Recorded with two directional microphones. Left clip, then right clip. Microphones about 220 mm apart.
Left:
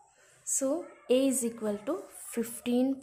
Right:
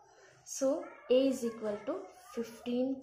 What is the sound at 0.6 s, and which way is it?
Speech, 30° left (ahead or behind).